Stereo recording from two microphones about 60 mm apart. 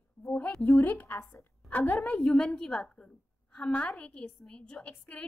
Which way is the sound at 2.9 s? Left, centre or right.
Centre.